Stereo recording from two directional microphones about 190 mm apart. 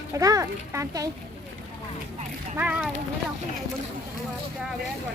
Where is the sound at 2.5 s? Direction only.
10° right (ahead or behind).